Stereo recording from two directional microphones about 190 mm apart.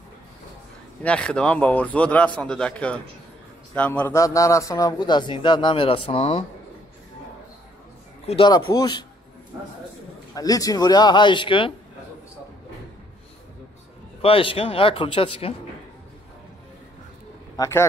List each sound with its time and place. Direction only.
1.0 s a man's voice: 5° left (ahead or behind); by 6.4 s 30° left (ahead or behind)
8.3 s a man's voice: 25° left (ahead or behind)
10.3 s a man's voice: 20° left (ahead or behind)
14.2 s a man's voice: 30° left (ahead or behind)